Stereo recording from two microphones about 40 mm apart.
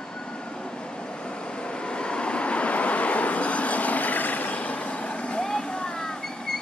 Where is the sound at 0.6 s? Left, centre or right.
Left.